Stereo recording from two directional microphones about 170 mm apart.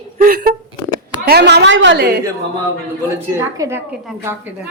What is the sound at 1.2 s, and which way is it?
Speech, 70° right (ahead or behind).